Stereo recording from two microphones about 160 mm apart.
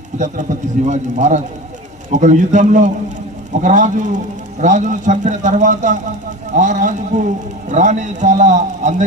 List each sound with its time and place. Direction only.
0.2 s a man's voice: 50° right (ahead or behind)